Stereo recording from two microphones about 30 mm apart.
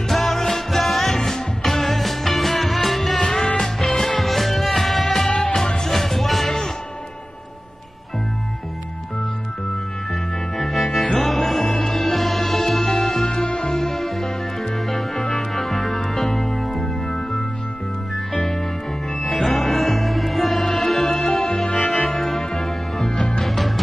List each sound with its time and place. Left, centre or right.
0.1 s music: centre
5.4 s music: centre
5.9 s music: centre
10.6 s music: centre
18.1 s music: centre